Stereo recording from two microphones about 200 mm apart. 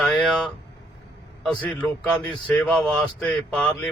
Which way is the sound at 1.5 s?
5° left (ahead or behind).